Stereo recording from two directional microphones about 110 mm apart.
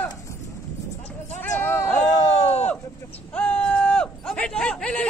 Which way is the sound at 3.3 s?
10° left (ahead or behind).